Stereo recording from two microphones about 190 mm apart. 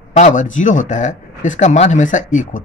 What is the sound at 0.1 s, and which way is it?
Speech, 40° left (ahead or behind).